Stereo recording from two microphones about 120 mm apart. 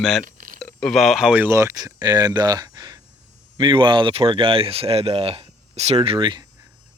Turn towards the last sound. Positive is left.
turn(degrees=-40)  # may be behind; listen again after turning